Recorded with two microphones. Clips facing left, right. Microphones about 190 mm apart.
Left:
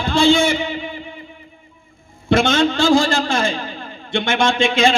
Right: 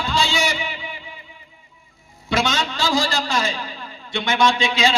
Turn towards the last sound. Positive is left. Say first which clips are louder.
# left 4 dB
turn(degrees=50)  # may be behind; listen again after turning